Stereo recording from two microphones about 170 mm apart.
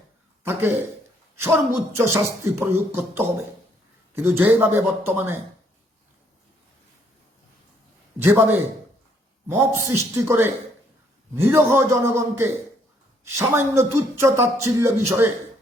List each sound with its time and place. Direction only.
0.4 s a man's voice: 15° right (ahead or behind)
8.2 s speech: 15° right (ahead or behind)